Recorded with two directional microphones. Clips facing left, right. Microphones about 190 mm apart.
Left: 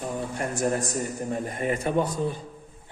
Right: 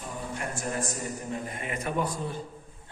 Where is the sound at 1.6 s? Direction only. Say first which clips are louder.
Left 7 dB; 35° left (ahead or behind).